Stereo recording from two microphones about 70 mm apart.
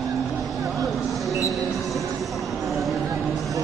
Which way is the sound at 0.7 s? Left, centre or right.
Centre.